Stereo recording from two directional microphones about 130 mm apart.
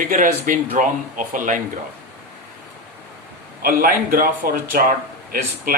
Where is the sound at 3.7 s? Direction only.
90° right.